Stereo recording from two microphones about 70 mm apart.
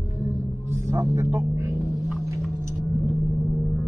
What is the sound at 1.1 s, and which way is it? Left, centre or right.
Speech, right.